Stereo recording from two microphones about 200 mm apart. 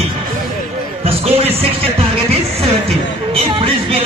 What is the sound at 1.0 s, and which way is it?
Speech, 30° right (ahead or behind).